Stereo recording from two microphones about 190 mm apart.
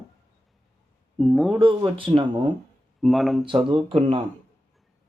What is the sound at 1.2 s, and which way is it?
Speech, centre (ahead or behind).